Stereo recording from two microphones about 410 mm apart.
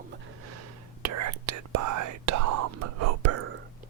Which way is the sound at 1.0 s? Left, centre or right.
Right.